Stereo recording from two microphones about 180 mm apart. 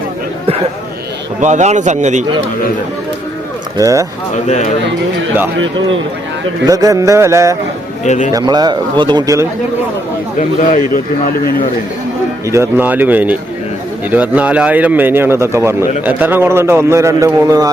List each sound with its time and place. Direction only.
1.4 s a man's voice: 40° right (ahead or behind)
3.8 s speech: 20° right (ahead or behind)
4.4 s speech: 40° left (ahead or behind)
6.7 s speech: 20° right (ahead or behind)
8.0 s speech: 40° left (ahead or behind)
8.3 s speech: 20° right (ahead or behind)
10.3 s a man's voice: 45° left (ahead or behind)
12.5 s speech: 15° right (ahead or behind)